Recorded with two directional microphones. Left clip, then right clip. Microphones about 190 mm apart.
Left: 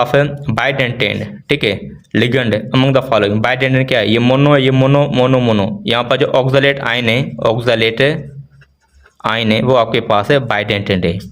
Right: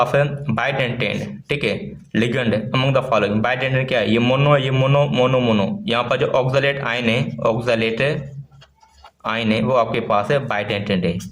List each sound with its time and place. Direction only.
0.0 s speech: 40° left (ahead or behind)
9.2 s a man's voice: 45° left (ahead or behind)